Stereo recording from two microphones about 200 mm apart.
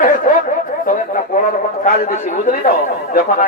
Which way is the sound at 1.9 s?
40° left (ahead or behind).